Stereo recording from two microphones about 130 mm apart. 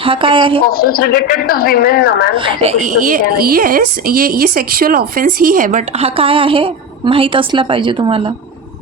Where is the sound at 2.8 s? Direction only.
90° right; by 8.3 s 40° right (ahead or behind).